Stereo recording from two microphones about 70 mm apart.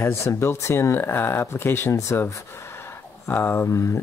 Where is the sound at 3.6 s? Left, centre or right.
Left.